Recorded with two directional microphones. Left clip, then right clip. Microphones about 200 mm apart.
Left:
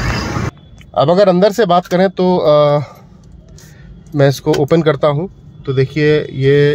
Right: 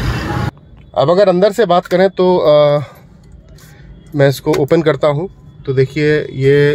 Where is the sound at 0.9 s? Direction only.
5° left (ahead or behind).